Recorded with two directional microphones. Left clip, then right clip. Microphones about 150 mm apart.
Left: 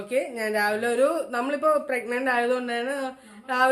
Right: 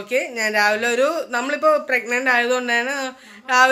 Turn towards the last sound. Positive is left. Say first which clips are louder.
# right 9 dB
turn(degrees=-20)  # may be behind; listen again after turning